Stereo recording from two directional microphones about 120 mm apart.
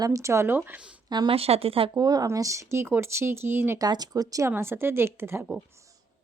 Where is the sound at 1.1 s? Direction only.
35° right (ahead or behind).